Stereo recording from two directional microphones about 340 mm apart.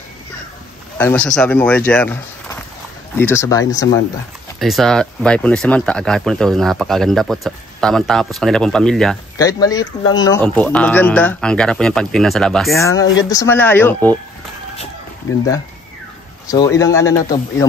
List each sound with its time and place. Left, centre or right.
0.9 s speech: centre
13.0 s speech: left
13.3 s speech: centre
16.4 s speech: centre